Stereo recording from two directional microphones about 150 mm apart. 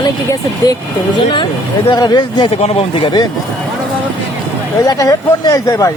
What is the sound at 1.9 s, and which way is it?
Speech, 30° left (ahead or behind).